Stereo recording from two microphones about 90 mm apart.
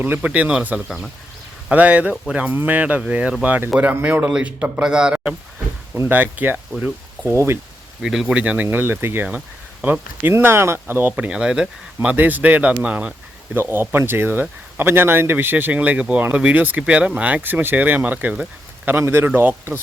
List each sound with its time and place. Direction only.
0.0 s a man's voice: 20° right (ahead or behind)
0.9 s speech: centre (ahead or behind)
1.7 s a man's voice: 15° right (ahead or behind)
6.0 s speech: 20° right (ahead or behind)
7.3 s speech: 30° right (ahead or behind)
8.0 s speech: 5° right (ahead or behind); by 11.1 s 25° right (ahead or behind)
11.2 s a man's voice: 10° right (ahead or behind)
12.0 s speech: 20° right (ahead or behind)